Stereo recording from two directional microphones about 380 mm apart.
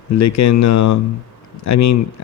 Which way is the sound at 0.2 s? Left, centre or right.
Left.